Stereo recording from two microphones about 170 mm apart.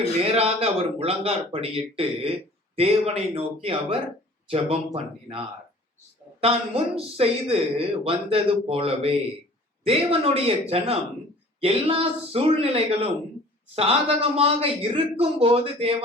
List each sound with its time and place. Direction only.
0.3 s speech: 35° right (ahead or behind)